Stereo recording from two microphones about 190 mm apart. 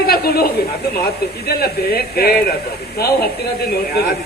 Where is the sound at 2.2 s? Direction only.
55° left (ahead or behind).